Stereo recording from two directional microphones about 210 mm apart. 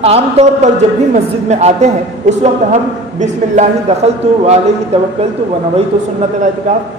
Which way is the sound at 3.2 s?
35° right (ahead or behind).